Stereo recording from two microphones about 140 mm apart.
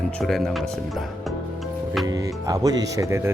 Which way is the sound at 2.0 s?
25° right (ahead or behind).